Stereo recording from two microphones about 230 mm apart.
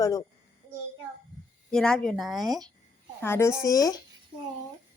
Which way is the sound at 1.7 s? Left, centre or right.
Centre.